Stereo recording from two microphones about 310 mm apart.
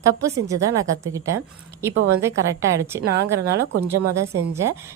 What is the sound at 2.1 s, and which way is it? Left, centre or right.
A woman's voice, centre.